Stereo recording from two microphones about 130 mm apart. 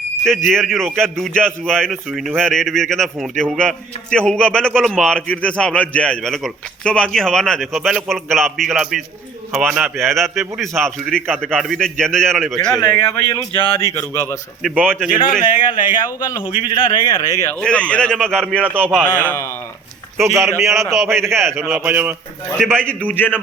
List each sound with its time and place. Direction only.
0.4 s a man's voice: centre (ahead or behind); by 14.3 s 20° left (ahead or behind)
14.6 s a man's voice: 10° right (ahead or behind)
15.5 s a man's voice: 40° left (ahead or behind)
16.0 s speech: 25° left (ahead or behind)
16.4 s a man's voice: 40° left (ahead or behind)
17.5 s a man's voice: 10° left (ahead or behind)
18.6 s a man's voice: 15° right (ahead or behind)
19.2 s a man's voice: 15° left (ahead or behind)
20.5 s a man's voice: 20° right (ahead or behind)
22.5 s a man's voice: 5° left (ahead or behind)